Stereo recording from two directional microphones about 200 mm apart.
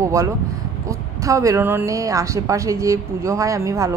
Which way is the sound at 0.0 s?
15° right (ahead or behind).